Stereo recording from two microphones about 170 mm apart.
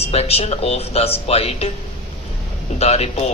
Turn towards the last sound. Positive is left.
turn(degrees=35)  # may be behind; listen again after turning